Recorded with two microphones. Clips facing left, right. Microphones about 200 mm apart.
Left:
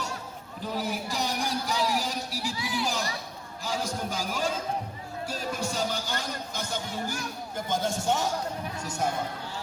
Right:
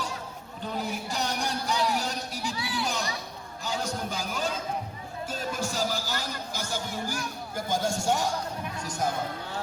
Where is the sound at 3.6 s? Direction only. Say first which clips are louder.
Even; centre (ahead or behind).